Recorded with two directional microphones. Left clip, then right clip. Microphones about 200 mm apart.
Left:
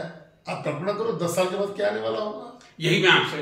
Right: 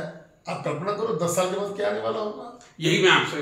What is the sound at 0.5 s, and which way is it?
A man's voice, 5° right (ahead or behind).